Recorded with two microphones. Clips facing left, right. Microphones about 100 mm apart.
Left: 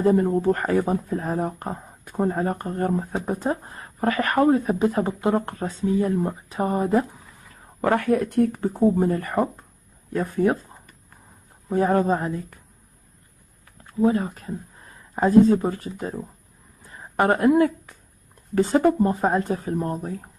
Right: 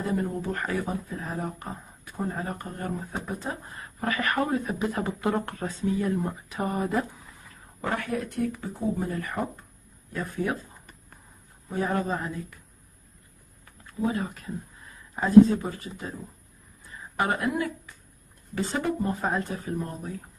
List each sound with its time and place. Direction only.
0.0 s speech: 40° left (ahead or behind)
7.8 s speech: 55° left (ahead or behind); by 10.7 s 40° left (ahead or behind)
11.7 s speech: 40° left (ahead or behind)
13.8 s speech: 35° left (ahead or behind)
16.9 s a sound: 45° left (ahead or behind)
17.6 s speech: 45° left (ahead or behind)